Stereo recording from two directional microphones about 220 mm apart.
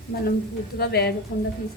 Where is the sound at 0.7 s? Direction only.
45° left (ahead or behind).